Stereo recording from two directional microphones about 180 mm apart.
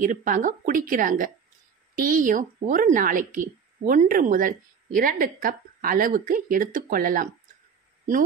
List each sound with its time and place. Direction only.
0.0 s a woman's voice: 45° right (ahead or behind)